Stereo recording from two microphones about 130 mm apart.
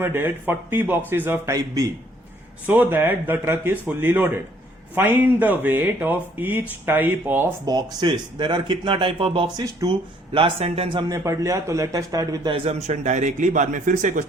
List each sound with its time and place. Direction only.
0.0 s speech: 15° right (ahead or behind)
1.5 s speech: 25° right (ahead or behind)
2.6 s speech: 15° right (ahead or behind)
7.6 s speech: 30° right (ahead or behind)
11.1 s speech: 25° right (ahead or behind)
12.5 s a man's voice: 45° right (ahead or behind); by 14.3 s 75° right (ahead or behind)